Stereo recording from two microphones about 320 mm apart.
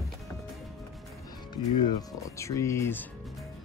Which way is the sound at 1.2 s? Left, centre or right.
Centre.